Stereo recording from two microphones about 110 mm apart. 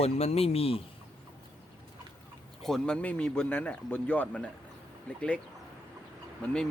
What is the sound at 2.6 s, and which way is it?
A man's voice, 5° left (ahead or behind).